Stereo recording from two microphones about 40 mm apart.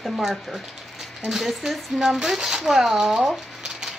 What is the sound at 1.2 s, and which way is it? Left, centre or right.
Speech, centre.